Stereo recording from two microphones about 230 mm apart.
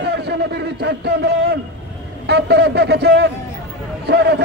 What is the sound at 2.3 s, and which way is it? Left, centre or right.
A man's voice, right.